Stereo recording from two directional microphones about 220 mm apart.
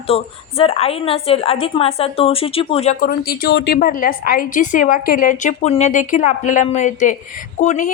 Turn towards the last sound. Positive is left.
turn(degrees=30)  # may be behind; listen again after turning